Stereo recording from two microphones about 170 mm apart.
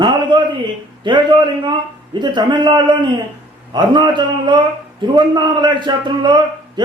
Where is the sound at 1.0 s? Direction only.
25° right (ahead or behind).